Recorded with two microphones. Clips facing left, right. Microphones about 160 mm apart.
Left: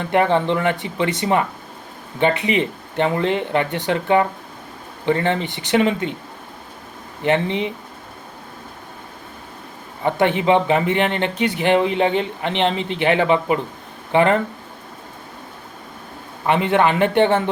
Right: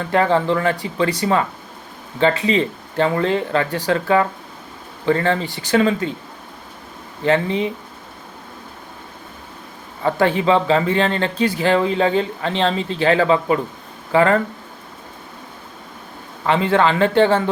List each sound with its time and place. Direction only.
0.0 s speech: 20° left (ahead or behind)
7.3 s speech: 20° left (ahead or behind)
10.0 s speech: 20° left (ahead or behind)
16.5 s speech: 20° left (ahead or behind)